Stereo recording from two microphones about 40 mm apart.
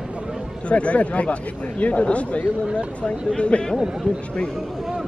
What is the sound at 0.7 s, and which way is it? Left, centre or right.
Speech, left.